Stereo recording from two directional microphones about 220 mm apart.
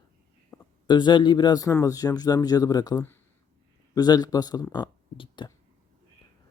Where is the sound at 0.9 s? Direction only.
20° left (ahead or behind).